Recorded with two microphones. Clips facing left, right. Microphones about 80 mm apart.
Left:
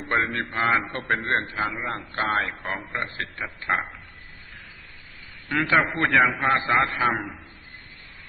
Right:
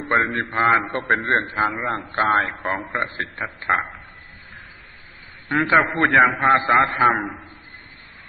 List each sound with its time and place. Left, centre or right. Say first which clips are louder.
0.3 s a man's voice: right 5 dB; right
5.5 s a man's voice: right 4 dB; right